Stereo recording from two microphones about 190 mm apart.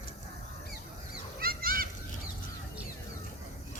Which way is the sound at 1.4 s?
50° right (ahead or behind).